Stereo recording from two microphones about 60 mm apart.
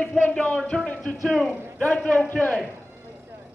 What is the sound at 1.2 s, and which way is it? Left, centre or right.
Speech, centre.